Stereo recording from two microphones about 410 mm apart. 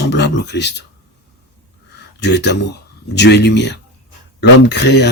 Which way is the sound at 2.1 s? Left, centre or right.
Left.